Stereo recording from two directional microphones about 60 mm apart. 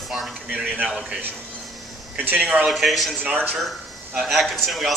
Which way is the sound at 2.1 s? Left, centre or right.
Right.